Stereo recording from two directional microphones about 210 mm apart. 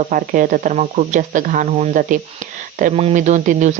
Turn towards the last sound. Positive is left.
turn(degrees=-35)  # may be behind; listen again after turning